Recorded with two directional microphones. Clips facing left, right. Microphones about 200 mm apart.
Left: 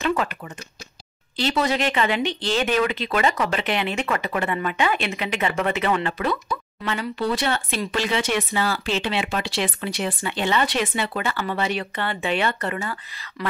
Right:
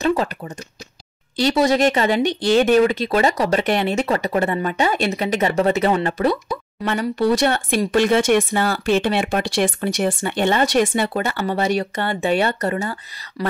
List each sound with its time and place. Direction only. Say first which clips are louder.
0.0 s a sound: right 4 dB; 35° right (ahead or behind)
1.5 s speech: right 6 dB; 40° right (ahead or behind)
6.9 s speech: right 6 dB; 50° right (ahead or behind)